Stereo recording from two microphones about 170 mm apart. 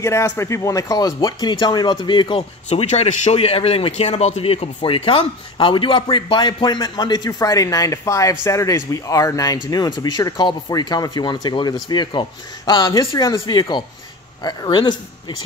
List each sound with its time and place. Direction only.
0.0 s speech: 15° left (ahead or behind)
2.7 s speech: 40° left (ahead or behind)